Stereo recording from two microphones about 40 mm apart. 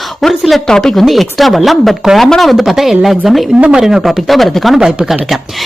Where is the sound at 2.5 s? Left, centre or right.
Centre.